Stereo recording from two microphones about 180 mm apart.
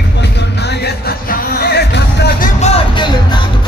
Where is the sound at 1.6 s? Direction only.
65° left (ahead or behind).